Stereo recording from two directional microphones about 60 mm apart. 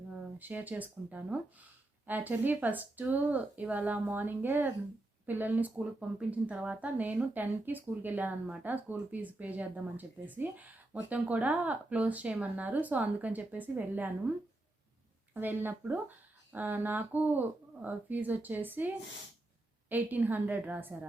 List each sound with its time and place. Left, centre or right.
0.3 s a woman's voice: right
6.0 s a woman's voice: centre
19.9 s a woman's voice: right